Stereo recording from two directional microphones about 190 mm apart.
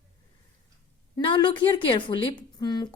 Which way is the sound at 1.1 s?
25° left (ahead or behind).